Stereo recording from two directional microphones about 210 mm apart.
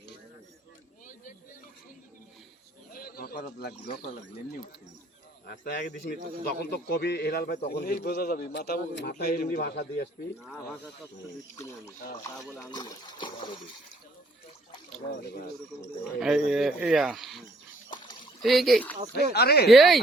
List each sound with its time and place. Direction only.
2.9 s bird: 45° left (ahead or behind)
5.5 s a man's voice: 45° left (ahead or behind)
10.4 s speech: centre (ahead or behind)
12.6 s speech: 20° left (ahead or behind)
15.7 s speech: 15° left (ahead or behind)
16.2 s speech: centre (ahead or behind)
18.4 s speech: centre (ahead or behind)
19.1 s a man's voice: 50° left (ahead or behind)
19.6 s speech: centre (ahead or behind)